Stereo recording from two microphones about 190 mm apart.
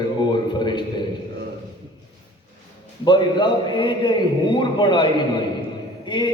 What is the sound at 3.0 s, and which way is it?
A man's voice, 25° left (ahead or behind).